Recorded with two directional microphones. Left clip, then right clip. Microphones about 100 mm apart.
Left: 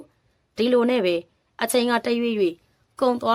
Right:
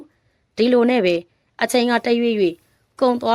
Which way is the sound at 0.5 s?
45° right (ahead or behind).